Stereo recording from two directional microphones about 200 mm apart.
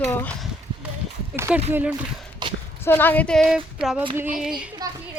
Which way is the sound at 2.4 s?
20° right (ahead or behind).